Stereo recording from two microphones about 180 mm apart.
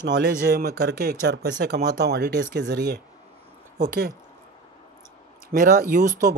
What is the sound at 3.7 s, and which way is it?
Speech, 75° right (ahead or behind).